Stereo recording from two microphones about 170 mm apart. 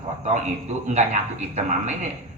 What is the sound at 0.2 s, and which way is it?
A man's voice, 40° right (ahead or behind).